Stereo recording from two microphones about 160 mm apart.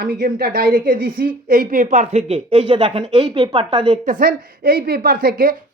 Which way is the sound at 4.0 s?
60° right (ahead or behind).